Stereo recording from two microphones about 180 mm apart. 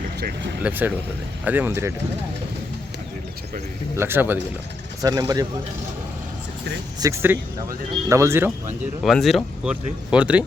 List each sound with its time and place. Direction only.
0.2 s speech: 60° right (ahead or behind)
0.6 s speech: 10° right (ahead or behind)
3.9 s speech: 10° right (ahead or behind)
7.0 s speech: 15° right (ahead or behind)
9.0 s speech: centre (ahead or behind)